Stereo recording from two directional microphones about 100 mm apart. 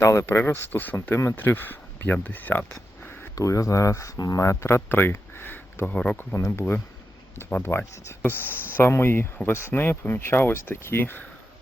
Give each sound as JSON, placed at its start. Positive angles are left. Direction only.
{"t": 0.0, "sound": "speech", "side_deg": 30}
{"t": 3.0, "sound": "a sound", "side_deg": 20}
{"t": 3.3, "sound": "speech", "side_deg": 35}
{"t": 6.1, "sound": "speech", "side_deg": 25}